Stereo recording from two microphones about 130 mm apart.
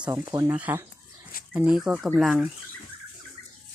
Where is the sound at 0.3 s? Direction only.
30° right (ahead or behind).